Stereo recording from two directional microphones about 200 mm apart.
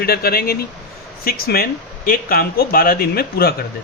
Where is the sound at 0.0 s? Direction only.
50° left (ahead or behind).